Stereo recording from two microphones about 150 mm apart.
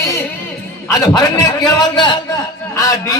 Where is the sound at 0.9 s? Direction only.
25° left (ahead or behind).